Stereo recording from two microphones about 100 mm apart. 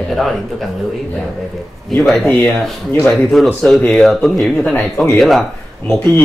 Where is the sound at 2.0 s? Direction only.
Centre (ahead or behind).